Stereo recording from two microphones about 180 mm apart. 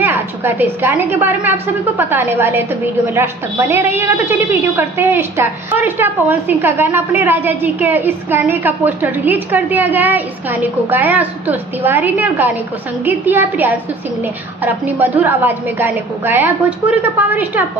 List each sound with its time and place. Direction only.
0.0 s a woman's voice: 10° right (ahead or behind)